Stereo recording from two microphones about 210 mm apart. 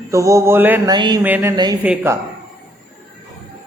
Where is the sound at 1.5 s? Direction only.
20° right (ahead or behind).